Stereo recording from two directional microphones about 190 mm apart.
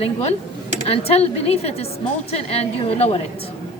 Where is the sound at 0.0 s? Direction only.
35° left (ahead or behind).